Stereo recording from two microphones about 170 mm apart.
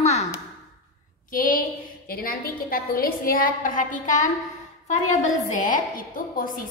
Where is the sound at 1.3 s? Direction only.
55° left (ahead or behind).